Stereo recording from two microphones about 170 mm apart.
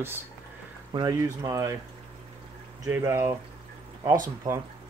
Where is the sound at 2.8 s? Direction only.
15° right (ahead or behind).